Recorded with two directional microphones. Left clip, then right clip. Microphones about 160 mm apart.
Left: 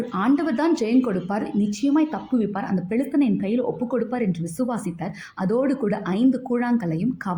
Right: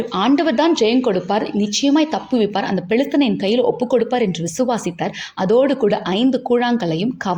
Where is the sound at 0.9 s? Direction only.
45° right (ahead or behind).